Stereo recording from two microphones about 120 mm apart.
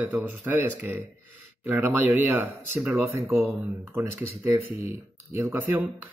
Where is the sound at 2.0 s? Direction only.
15° right (ahead or behind).